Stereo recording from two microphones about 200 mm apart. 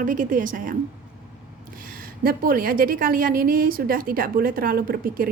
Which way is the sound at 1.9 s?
45° right (ahead or behind).